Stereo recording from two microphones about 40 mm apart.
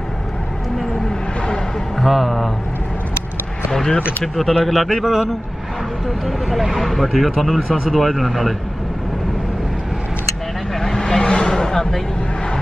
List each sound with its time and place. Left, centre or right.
2.0 s speech: centre
4.2 s speech: centre
10.8 s vehicle: centre